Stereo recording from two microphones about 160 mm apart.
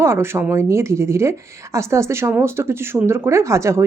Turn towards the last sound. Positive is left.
turn(degrees=-15)  # may be behind; listen again after turning